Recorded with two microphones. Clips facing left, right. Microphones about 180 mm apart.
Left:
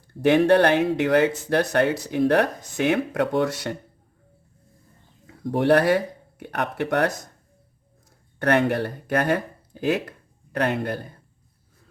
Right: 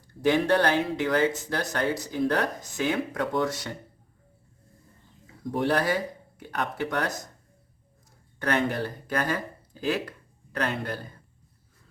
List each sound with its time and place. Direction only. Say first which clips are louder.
0.1 s speech: left 6 dB; 65° left (ahead or behind)
5.5 s speech: left 7 dB; 65° left (ahead or behind)
8.4 s speech: left 6 dB; 65° left (ahead or behind)